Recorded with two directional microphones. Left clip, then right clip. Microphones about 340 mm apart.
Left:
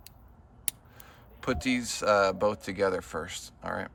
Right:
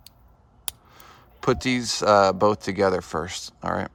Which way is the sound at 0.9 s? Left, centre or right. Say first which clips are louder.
Right 6 dB; centre.